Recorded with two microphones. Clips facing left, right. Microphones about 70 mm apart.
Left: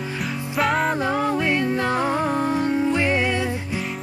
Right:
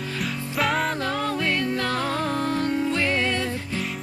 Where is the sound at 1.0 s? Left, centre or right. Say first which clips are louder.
Left 4 dB; centre.